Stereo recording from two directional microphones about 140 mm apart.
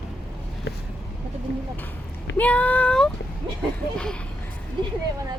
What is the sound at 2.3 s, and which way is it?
Speech, 10° left (ahead or behind).